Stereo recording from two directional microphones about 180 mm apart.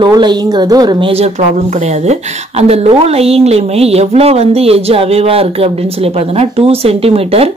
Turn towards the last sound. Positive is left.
turn(degrees=-35)  # may be behind; listen again after turning